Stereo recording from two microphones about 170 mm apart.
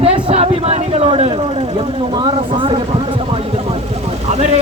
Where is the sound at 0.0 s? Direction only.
35° right (ahead or behind).